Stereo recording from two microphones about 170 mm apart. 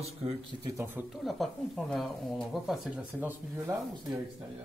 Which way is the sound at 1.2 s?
Centre (ahead or behind).